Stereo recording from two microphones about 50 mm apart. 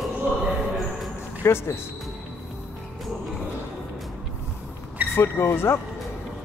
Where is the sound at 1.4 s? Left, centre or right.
Left.